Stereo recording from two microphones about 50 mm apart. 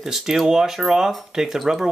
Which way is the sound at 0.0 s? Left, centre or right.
Centre.